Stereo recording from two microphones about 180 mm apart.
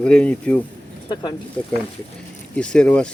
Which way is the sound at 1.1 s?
25° left (ahead or behind).